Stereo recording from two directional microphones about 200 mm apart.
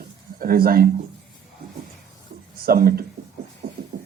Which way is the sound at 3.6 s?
35° right (ahead or behind).